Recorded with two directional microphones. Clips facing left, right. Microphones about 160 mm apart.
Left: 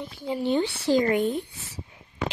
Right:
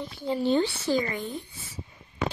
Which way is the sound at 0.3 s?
15° left (ahead or behind).